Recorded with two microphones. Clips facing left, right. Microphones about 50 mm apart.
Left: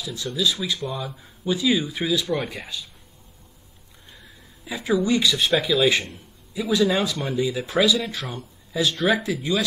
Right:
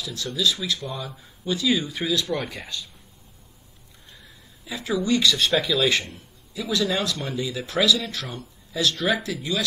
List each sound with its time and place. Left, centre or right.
0.0 s speech: centre
1.2 s speech: centre
4.6 s speech: centre
6.7 s speech: centre
7.2 s speech: centre